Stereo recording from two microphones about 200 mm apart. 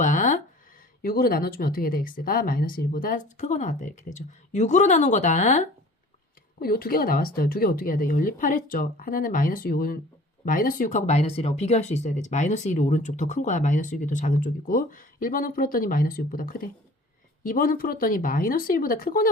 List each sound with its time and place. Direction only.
0.0 s a sound: 40° left (ahead or behind)
1.0 s speech: 50° left (ahead or behind)
6.6 s speech: 50° left (ahead or behind)